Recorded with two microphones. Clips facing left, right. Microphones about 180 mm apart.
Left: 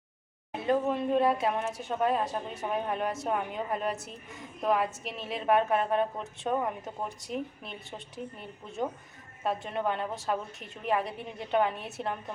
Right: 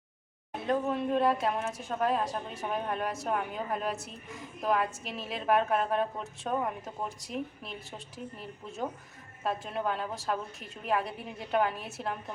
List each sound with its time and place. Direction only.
0.5 s a woman's voice: centre (ahead or behind)